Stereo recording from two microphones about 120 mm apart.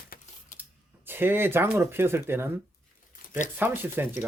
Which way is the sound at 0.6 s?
15° right (ahead or behind).